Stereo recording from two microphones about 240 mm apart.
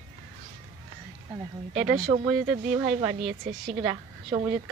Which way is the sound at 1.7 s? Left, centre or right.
Centre.